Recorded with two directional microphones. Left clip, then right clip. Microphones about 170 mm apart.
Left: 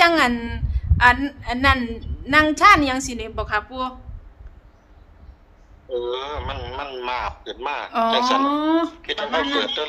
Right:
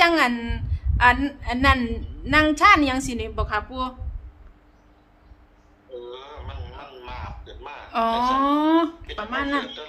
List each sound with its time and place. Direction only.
0.0 s a woman's voice: centre (ahead or behind)
5.9 s a man's voice: 70° left (ahead or behind)
7.9 s a woman's voice: centre (ahead or behind)
8.4 s speech: 15° right (ahead or behind)
9.2 s a man's voice: 70° left (ahead or behind)